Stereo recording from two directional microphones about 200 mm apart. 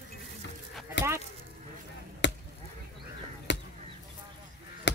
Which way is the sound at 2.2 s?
60° left (ahead or behind).